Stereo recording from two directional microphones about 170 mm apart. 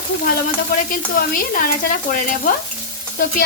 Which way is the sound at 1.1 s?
55° left (ahead or behind).